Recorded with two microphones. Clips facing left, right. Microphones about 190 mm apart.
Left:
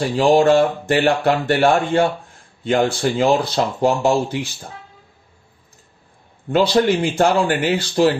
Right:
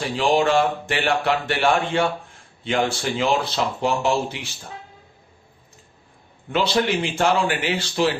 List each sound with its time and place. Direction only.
0.0 s speech: 40° left (ahead or behind)
6.5 s speech: 40° left (ahead or behind)